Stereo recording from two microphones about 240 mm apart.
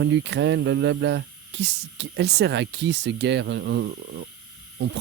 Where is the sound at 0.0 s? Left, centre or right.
Right.